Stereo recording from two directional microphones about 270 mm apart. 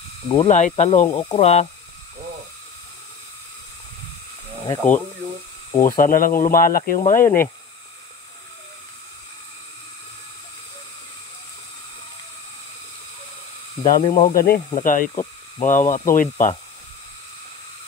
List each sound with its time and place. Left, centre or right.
0.3 s speech: left
4.6 s speech: centre
5.8 s speech: left
7.2 s speech: centre
14.1 s speech: left